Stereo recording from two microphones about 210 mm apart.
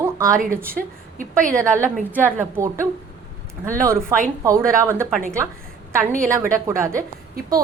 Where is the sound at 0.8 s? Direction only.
Centre (ahead or behind).